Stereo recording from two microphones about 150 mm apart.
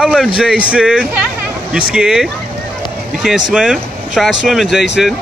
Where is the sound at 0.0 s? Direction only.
Centre (ahead or behind).